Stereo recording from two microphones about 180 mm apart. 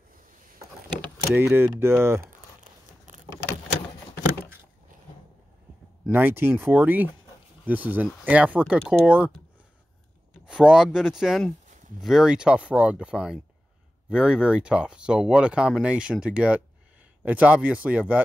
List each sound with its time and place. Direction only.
1.3 s speech: 10° right (ahead or behind)
2.2 s a sound: 45° right (ahead or behind)
6.0 s speech: 10° right (ahead or behind)
10.4 s speech: 5° right (ahead or behind)